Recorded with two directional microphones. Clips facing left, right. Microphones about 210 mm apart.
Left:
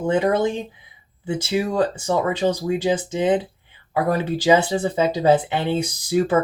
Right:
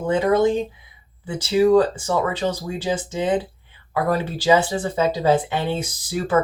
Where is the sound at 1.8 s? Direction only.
15° left (ahead or behind).